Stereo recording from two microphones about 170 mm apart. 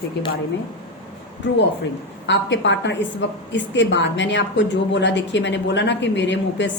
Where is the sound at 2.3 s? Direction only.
90° left.